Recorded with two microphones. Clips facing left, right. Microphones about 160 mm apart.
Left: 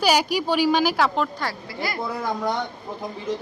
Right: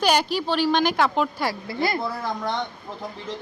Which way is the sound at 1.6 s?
25° right (ahead or behind).